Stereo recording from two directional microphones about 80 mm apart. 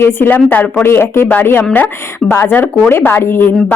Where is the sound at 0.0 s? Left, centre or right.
Left.